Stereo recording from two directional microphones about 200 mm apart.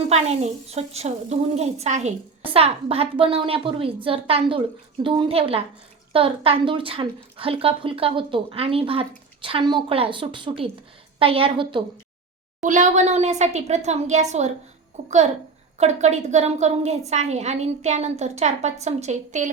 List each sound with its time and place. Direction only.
0.1 s a woman's voice: 35° right (ahead or behind)
12.6 s a woman's voice: 40° right (ahead or behind)